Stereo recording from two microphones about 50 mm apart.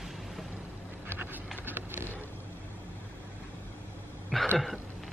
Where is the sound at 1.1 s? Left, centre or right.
Right.